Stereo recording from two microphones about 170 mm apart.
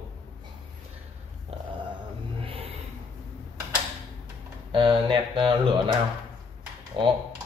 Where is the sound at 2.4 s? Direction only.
35° right (ahead or behind).